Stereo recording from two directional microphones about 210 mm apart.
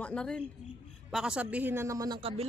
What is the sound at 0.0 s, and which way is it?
A man's voice, 5° left (ahead or behind).